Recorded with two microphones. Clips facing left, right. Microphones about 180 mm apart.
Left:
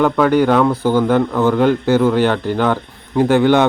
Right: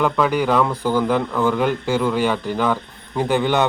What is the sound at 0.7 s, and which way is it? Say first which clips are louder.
Speech: left 5 dB; 10° left (ahead or behind).